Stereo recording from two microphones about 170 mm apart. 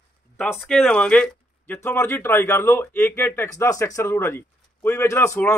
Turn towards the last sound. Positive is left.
turn(degrees=10)  # may be behind; listen again after turning